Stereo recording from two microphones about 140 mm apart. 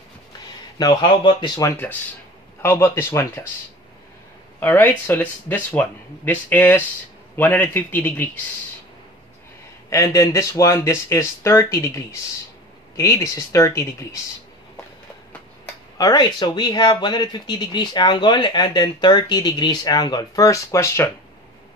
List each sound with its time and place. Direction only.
0.7 s speech: 30° left (ahead or behind)
1.6 s speech: 15° left (ahead or behind)
4.6 s speech: 10° left (ahead or behind)
9.8 s speech: 20° left (ahead or behind)
16.0 s speech: 30° left (ahead or behind)